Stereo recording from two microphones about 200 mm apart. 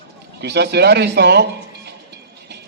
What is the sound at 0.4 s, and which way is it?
A man's voice, 55° right (ahead or behind).